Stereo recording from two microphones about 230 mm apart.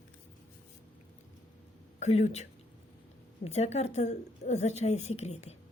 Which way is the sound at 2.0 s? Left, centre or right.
Left.